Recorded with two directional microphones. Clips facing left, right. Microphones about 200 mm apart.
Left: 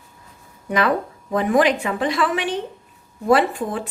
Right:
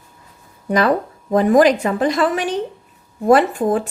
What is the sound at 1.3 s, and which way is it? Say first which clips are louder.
A woman's voice: right 5 dB; 40° right (ahead or behind).